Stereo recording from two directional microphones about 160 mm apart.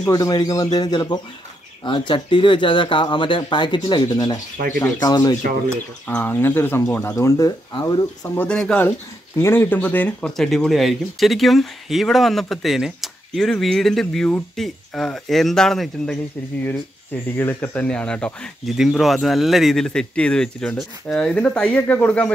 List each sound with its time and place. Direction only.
0.1 s speech: 25° left (ahead or behind)
6.0 s speech: 10° left (ahead or behind)
8.4 s speech: 5° left (ahead or behind)
17.1 s speech: 15° left (ahead or behind)